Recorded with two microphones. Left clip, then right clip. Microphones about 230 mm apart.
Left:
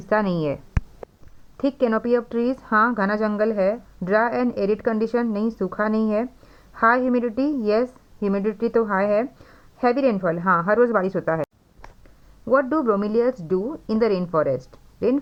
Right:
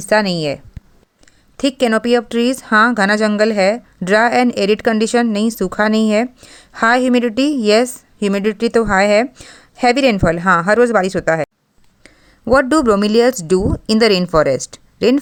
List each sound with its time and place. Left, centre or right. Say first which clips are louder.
0.0 s speech: right 7 dB; right
12.5 s a woman's voice: right 7 dB; right